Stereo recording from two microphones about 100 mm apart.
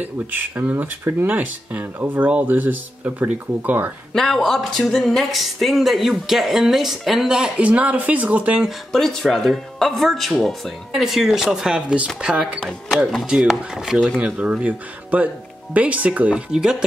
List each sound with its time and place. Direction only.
0.0 s speech: 20° right (ahead or behind)
4.1 s speech: 5° left (ahead or behind)
8.9 s speech: 5° left (ahead or behind)